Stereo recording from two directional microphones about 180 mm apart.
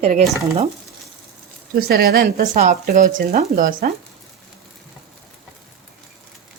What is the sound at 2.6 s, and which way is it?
Speech, 45° right (ahead or behind).